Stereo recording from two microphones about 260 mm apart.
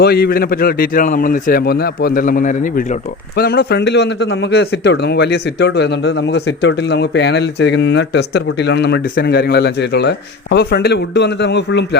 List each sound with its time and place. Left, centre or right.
0.0 s a man's voice: left